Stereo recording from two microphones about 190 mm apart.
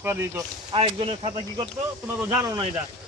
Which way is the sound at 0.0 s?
10° right (ahead or behind).